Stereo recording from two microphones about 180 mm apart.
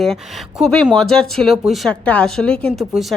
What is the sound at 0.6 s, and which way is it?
Speech, centre (ahead or behind).